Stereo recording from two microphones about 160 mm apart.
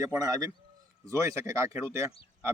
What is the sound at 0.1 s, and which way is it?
Speech, 25° right (ahead or behind).